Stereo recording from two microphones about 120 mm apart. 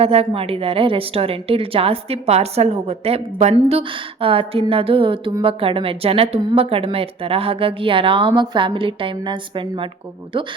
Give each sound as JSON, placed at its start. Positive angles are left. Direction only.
{"t": 0.0, "sound": "a woman's voice", "side_deg": -55}